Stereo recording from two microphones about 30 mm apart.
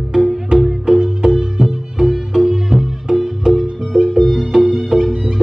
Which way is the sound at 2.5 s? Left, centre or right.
Centre.